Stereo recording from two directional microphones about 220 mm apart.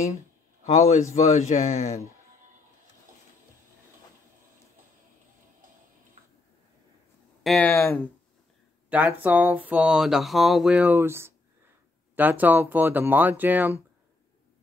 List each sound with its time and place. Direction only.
0.7 s speech: 30° left (ahead or behind)
7.4 s speech: 5° left (ahead or behind)
8.9 s speech: 5° right (ahead or behind)